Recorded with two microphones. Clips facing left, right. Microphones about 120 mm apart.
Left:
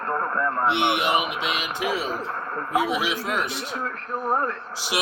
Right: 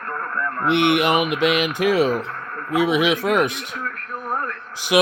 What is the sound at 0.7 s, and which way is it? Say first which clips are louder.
Speech: right 10 dB; 55° right (ahead or behind).